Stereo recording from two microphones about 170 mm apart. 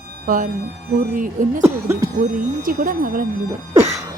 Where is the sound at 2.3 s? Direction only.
55° right (ahead or behind).